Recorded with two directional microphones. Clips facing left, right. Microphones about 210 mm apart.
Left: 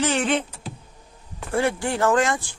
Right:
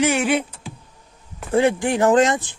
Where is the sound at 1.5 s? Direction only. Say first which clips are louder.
Right 5 dB; 20° right (ahead or behind).